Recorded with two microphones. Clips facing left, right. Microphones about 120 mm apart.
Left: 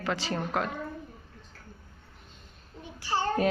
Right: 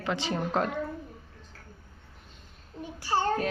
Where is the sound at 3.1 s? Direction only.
30° right (ahead or behind).